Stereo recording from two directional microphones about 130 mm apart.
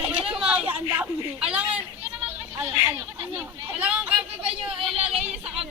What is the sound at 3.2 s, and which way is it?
Speech, 15° right (ahead or behind).